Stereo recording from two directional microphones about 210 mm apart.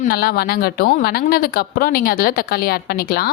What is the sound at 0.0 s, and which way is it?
A woman's voice, 45° left (ahead or behind).